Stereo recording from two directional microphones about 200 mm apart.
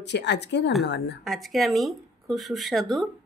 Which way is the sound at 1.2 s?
Centre (ahead or behind).